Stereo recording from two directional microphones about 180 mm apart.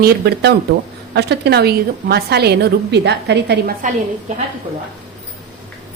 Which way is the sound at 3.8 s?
45° right (ahead or behind).